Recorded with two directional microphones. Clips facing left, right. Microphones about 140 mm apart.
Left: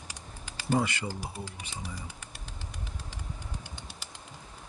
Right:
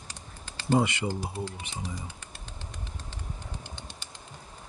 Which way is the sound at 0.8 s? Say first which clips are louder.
Right 4 dB; 20° right (ahead or behind).